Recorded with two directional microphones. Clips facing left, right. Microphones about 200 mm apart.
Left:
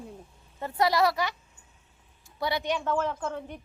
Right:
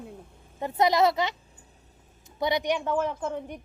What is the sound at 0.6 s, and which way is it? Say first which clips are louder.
A woman's voice: right 2 dB; 20° right (ahead or behind).